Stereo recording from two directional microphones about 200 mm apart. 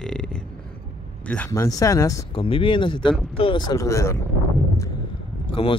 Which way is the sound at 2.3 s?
25° left (ahead or behind).